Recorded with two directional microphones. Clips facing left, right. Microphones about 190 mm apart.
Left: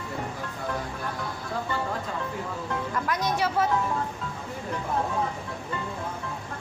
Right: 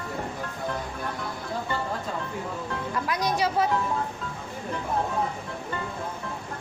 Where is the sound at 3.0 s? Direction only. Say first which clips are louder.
Right 2 dB; 15° right (ahead or behind).